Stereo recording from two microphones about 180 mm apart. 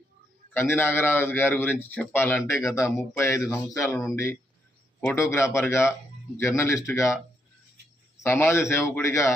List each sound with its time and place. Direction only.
0.7 s a man's voice: 15° left (ahead or behind)
8.2 s a man's voice: 15° left (ahead or behind)